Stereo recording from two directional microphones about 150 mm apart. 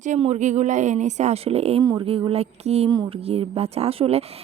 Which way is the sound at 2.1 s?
40° right (ahead or behind).